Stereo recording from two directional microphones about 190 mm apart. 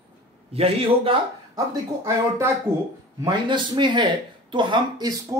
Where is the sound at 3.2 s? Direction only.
25° right (ahead or behind).